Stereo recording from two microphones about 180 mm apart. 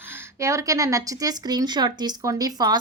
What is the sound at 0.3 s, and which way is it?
Speech, 15° right (ahead or behind).